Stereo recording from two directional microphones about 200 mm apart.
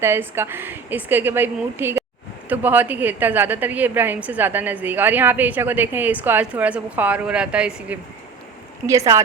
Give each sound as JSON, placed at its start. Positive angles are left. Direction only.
{"t": 0.0, "sound": "a woman's voice", "side_deg": -10}